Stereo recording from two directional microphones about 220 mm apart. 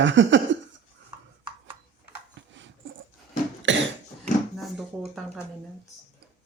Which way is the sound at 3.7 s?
55° right (ahead or behind).